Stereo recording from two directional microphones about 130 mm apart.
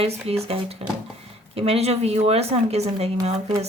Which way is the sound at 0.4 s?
50° right (ahead or behind).